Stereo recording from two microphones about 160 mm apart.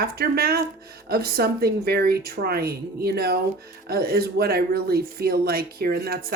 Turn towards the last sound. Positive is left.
turn(degrees=-75)  # may be behind; listen again after turning